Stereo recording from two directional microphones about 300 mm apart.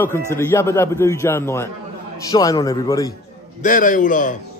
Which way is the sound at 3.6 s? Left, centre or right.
Left.